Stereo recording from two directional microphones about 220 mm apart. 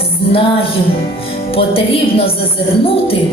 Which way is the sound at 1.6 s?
25° left (ahead or behind).